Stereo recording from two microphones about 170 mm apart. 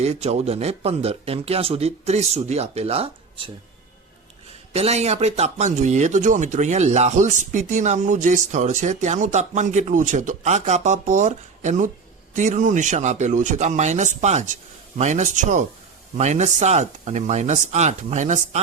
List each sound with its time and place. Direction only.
0.0 s speech: 40° right (ahead or behind)
4.7 s speech: 40° right (ahead or behind)